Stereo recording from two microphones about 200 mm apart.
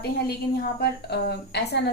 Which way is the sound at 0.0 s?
50° left (ahead or behind).